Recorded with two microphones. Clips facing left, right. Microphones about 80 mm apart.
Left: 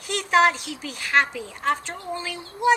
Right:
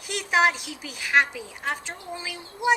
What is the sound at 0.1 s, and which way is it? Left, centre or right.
A woman's voice, centre.